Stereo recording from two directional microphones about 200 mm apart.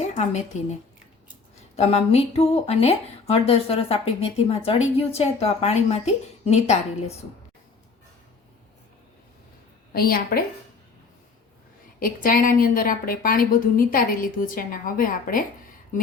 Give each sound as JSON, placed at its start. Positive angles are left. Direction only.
{"t": 0.0, "sound": "a woman's voice", "side_deg": 35}
{"t": 1.7, "sound": "speech", "side_deg": 30}
{"t": 9.9, "sound": "a woman's voice", "side_deg": 50}
{"t": 11.9, "sound": "a woman's voice", "side_deg": 45}